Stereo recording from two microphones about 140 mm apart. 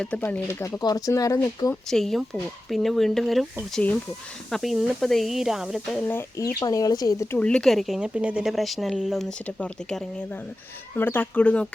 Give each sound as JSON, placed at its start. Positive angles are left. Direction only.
{"t": 0.0, "sound": "speech", "side_deg": 10}
{"t": 0.8, "sound": "speech", "side_deg": 25}
{"t": 1.9, "sound": "speech", "side_deg": 0}
{"t": 6.1, "sound": "speech", "side_deg": 20}
{"t": 7.3, "sound": "speech", "side_deg": 5}
{"t": 10.9, "sound": "speech", "side_deg": 15}